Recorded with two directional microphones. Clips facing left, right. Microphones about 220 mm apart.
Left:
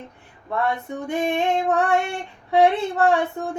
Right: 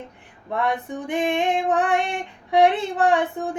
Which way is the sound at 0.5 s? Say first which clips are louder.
Even; 15° right (ahead or behind).